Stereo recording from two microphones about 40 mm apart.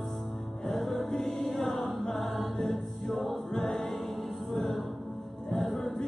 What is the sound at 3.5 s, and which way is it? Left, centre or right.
Music, centre.